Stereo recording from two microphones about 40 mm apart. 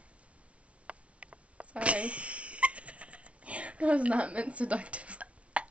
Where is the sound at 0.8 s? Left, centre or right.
Right.